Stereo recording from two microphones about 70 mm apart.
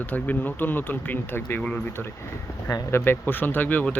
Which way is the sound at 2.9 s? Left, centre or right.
Left.